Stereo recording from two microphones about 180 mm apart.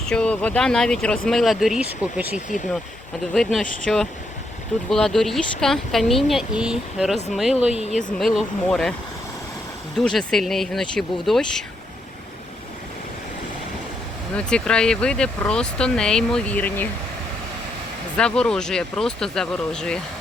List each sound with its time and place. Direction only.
0.0 s speech: 5° left (ahead or behind)
10.0 s speech: centre (ahead or behind)
14.3 s speech: 5° left (ahead or behind)
18.2 s speech: 5° left (ahead or behind)